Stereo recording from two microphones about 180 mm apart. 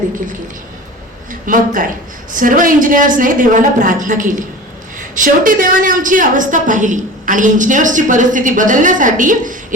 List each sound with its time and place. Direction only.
1.3 s a woman's voice: 50° right (ahead or behind)